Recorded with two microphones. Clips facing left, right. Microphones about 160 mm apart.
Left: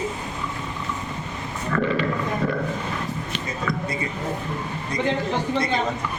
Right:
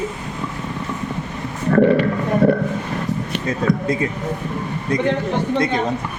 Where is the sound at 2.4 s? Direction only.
65° right (ahead or behind).